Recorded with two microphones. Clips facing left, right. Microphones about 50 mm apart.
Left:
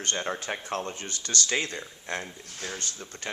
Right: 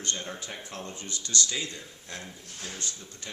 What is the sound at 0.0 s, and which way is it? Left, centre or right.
Speech, left.